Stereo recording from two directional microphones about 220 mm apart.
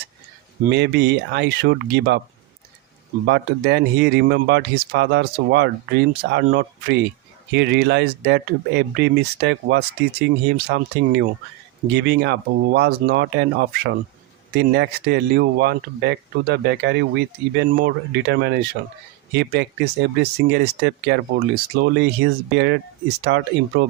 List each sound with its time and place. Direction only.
0.7 s speech: 50° right (ahead or behind)
3.2 s speech: 50° right (ahead or behind)